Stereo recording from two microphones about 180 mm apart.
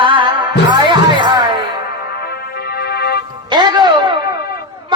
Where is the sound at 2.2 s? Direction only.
60° left (ahead or behind).